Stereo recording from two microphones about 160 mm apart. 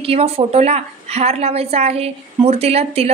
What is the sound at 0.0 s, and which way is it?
A woman's voice, 40° right (ahead or behind).